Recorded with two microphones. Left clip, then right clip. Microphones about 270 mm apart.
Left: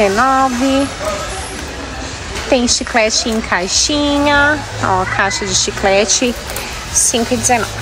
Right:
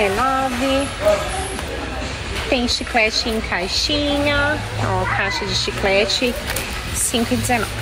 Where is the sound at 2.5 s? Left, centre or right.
Centre.